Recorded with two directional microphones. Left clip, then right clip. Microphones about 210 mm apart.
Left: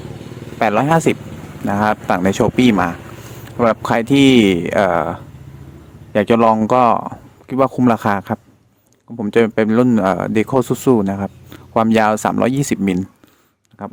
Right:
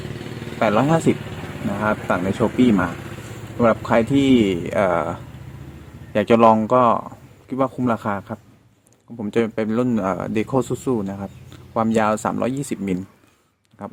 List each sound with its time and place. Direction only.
0.6 s speech: 25° left (ahead or behind)